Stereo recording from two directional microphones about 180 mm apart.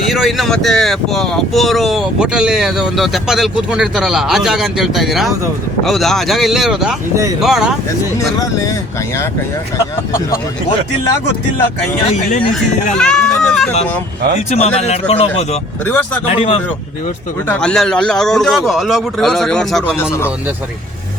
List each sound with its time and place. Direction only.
0.1 s speech: centre (ahead or behind)
12.3 s speech: 50° left (ahead or behind)
12.9 s speech: 5° left (ahead or behind)
14.5 s speech: 35° left (ahead or behind)
15.9 s speech: 10° left (ahead or behind)
16.3 s speech: 30° left (ahead or behind)
17.5 s speech: 5° left (ahead or behind)